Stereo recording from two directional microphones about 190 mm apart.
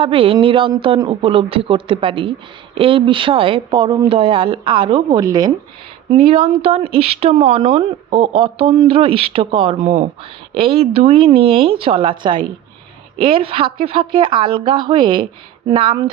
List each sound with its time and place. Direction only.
0.0 s a woman's voice: 30° right (ahead or behind)
6.1 s a woman's voice: 30° right (ahead or behind)